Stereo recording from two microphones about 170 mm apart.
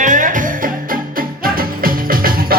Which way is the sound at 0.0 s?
50° right (ahead or behind).